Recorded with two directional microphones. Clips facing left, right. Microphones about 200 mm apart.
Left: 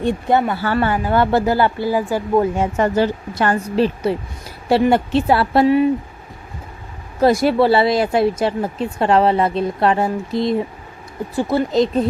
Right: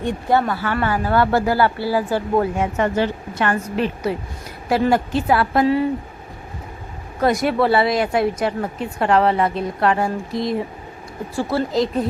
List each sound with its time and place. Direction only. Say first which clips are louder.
0.0 s speech: left 2 dB; 20° left (ahead or behind)
0.6 s a woman's voice: left 3 dB; 30° left (ahead or behind); by 2.5 s 10° left (ahead or behind)
2.6 s a woman's voice: left 3 dB; 35° left (ahead or behind)
7.2 s speech: left 4 dB; 30° left (ahead or behind)